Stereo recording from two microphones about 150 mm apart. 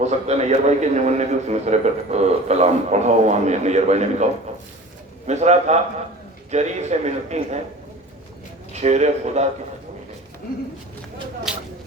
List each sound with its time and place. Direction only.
0.0 s a man's voice: 45° right (ahead or behind)
8.7 s a man's voice: 50° right (ahead or behind)
11.5 s a sound: 5° right (ahead or behind)